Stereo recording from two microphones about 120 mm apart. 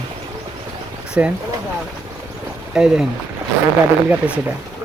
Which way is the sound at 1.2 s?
15° right (ahead or behind).